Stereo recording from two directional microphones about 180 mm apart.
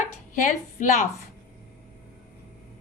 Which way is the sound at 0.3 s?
45° left (ahead or behind).